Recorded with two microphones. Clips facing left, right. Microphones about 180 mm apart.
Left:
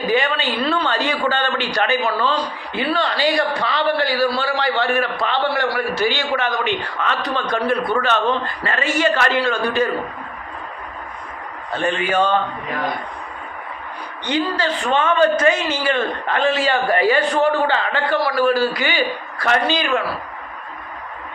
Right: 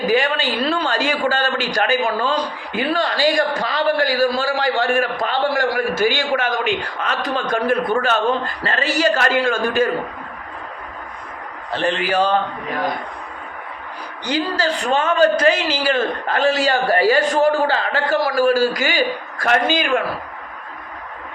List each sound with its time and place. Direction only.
0.2 s a man's voice: 45° right (ahead or behind)
11.7 s a man's voice: 30° right (ahead or behind)
14.3 s a man's voice: 40° right (ahead or behind)